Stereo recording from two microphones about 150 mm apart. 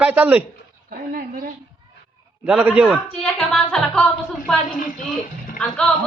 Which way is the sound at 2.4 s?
10° right (ahead or behind).